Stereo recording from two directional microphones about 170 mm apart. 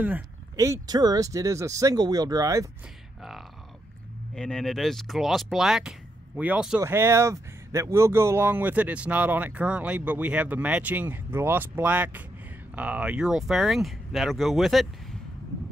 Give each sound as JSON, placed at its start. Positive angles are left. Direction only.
{"t": 0.6, "sound": "speech", "side_deg": -20}
{"t": 3.2, "sound": "speech", "side_deg": 0}